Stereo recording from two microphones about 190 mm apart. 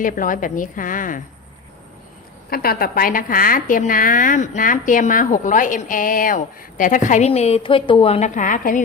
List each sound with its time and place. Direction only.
0.0 s a woman's voice: 45° left (ahead or behind)
2.5 s a woman's voice: 50° left (ahead or behind)